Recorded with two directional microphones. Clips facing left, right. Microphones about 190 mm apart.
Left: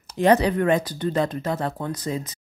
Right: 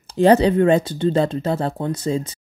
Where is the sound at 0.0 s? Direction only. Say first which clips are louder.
Right 4 dB; 30° right (ahead or behind).